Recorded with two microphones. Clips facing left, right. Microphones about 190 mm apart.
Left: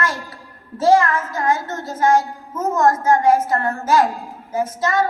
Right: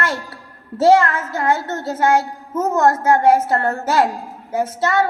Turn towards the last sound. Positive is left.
turn(degrees=-65)  # may be behind; listen again after turning